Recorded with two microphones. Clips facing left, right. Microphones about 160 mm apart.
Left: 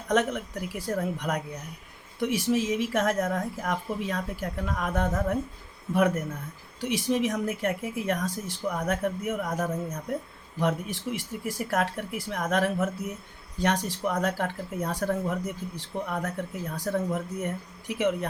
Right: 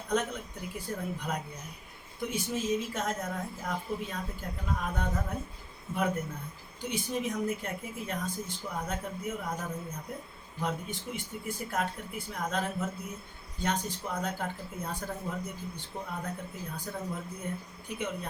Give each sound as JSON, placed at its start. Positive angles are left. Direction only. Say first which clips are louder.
{"t": 0.1, "sound": "speech", "louder": "left 6 dB", "side_deg": 85}
{"t": 6.8, "sound": "speech", "louder": "left 7 dB", "side_deg": 90}